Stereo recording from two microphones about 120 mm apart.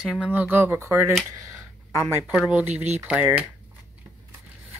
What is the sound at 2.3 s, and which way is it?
Speech, 10° right (ahead or behind).